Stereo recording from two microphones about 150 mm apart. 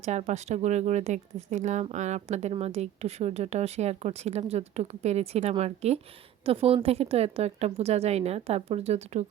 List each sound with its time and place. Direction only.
0.0 s speech: 50° right (ahead or behind)